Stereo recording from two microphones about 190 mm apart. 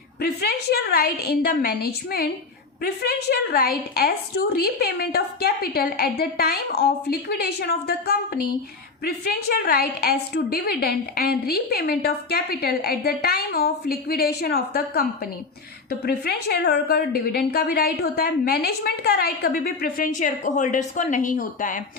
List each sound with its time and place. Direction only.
0.2 s a woman's voice: 55° left (ahead or behind)